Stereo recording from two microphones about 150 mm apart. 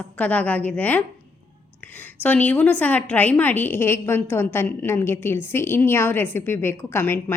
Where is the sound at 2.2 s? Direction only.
10° left (ahead or behind).